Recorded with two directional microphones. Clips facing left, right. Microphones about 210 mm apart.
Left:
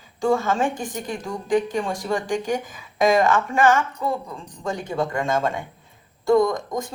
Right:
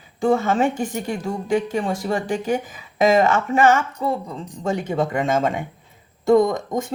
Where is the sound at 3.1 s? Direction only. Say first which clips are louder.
Right 2 dB; 25° right (ahead or behind).